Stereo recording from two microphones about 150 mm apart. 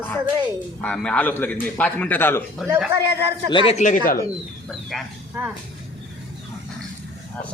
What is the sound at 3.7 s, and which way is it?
Speech, 60° left (ahead or behind).